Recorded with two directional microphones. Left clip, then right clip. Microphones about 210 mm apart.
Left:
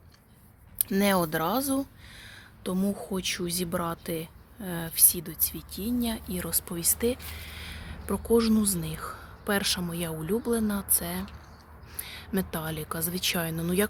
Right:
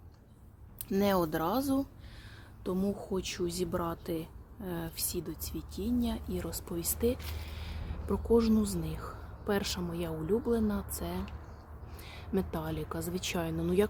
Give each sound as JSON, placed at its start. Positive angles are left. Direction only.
{"t": 0.8, "sound": "a woman's voice", "side_deg": 15}